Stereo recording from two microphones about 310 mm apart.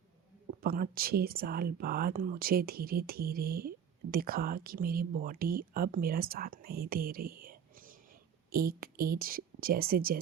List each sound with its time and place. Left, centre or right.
0.6 s speech: right